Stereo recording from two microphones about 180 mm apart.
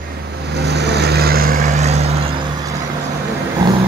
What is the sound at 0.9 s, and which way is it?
Vehicle, 65° right (ahead or behind).